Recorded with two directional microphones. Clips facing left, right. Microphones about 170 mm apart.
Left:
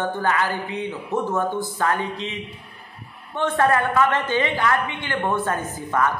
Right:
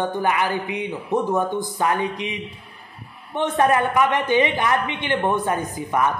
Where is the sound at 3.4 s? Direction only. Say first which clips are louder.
Right 1 dB; 20° right (ahead or behind).